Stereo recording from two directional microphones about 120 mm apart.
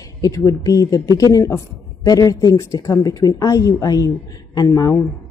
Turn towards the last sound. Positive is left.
turn(degrees=30)  # may be behind; listen again after turning